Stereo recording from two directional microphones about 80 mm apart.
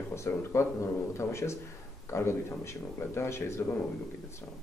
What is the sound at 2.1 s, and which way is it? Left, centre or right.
A man's voice, left.